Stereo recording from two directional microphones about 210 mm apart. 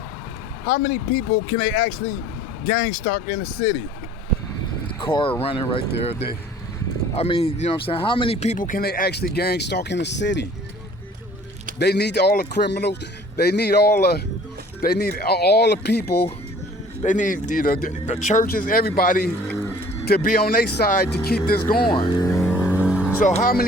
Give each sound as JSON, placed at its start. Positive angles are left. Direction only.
{"t": 0.7, "sound": "speech", "side_deg": 40}
{"t": 4.9, "sound": "speech", "side_deg": 25}
{"t": 11.8, "sound": "speech", "side_deg": 50}
{"t": 17.0, "sound": "speech", "side_deg": 35}
{"t": 21.8, "sound": "speech", "side_deg": 20}
{"t": 22.4, "sound": "vehicle", "side_deg": 0}
{"t": 23.2, "sound": "speech", "side_deg": 40}